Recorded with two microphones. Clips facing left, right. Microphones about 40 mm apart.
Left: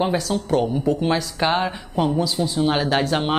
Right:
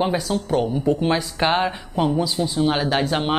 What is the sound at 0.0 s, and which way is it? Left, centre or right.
Speech, centre.